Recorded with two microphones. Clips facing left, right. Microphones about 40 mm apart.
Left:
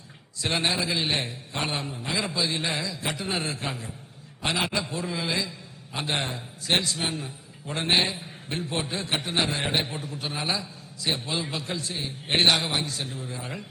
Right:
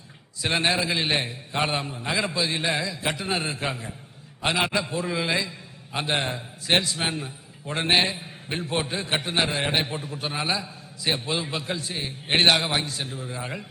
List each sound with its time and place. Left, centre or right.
0.4 s a man's voice: centre
10.6 s a man's voice: right
11.3 s a man's voice: centre
12.8 s a man's voice: centre